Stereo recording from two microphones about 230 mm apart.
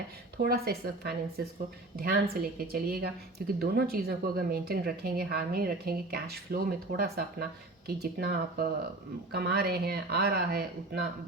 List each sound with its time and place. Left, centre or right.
0.3 s speech: right